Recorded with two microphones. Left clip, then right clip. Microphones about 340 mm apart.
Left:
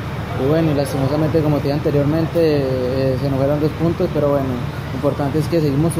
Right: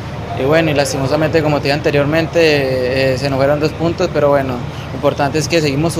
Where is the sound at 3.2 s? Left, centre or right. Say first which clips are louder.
Right 4 dB; right.